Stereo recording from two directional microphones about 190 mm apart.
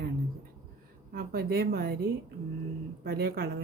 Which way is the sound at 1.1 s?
50° right (ahead or behind).